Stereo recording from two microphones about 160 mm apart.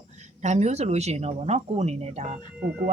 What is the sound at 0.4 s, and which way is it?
A woman's voice, 45° right (ahead or behind).